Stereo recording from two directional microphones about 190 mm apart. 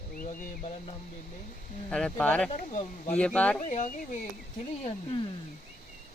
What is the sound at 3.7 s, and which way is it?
Speech, 40° left (ahead or behind).